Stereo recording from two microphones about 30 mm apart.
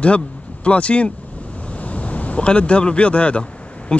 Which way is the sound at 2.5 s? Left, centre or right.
Left.